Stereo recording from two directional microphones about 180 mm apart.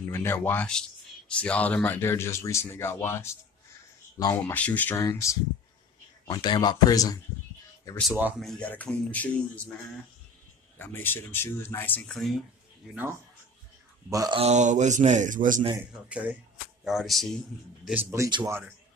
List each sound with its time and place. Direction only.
0.0 s speech: 15° left (ahead or behind)
8.1 s speech: 10° right (ahead or behind)
8.5 s speech: 5° left (ahead or behind)
10.8 s speech: 10° left (ahead or behind)
14.1 s speech: 20° right (ahead or behind)
14.4 s a sound: 40° right (ahead or behind)
15.9 s speech: 5° right (ahead or behind)
17.8 s speech: 15° right (ahead or behind)